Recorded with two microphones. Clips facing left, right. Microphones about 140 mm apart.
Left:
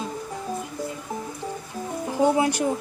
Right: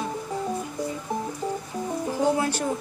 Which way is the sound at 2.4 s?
15° left (ahead or behind).